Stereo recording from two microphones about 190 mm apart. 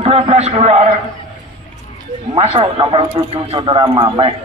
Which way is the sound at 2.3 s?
25° right (ahead or behind).